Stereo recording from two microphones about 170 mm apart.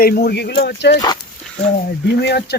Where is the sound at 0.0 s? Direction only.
65° left (ahead or behind); by 0.9 s 80° left.